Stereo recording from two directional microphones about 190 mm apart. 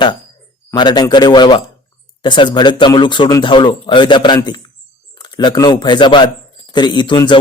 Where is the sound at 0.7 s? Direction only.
20° left (ahead or behind).